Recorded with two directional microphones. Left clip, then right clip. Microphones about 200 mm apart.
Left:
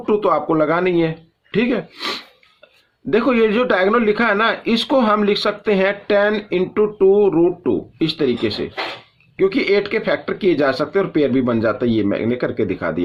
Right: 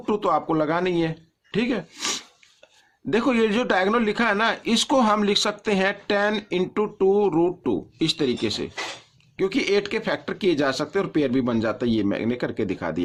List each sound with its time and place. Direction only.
0.0 s a man's voice: 30° right (ahead or behind)